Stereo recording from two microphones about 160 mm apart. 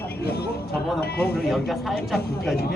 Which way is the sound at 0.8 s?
Centre (ahead or behind).